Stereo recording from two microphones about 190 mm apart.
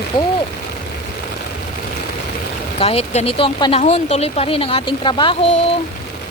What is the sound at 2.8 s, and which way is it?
Speech, 30° left (ahead or behind).